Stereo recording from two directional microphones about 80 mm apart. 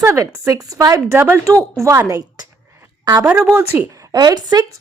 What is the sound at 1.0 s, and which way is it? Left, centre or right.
Speech, right.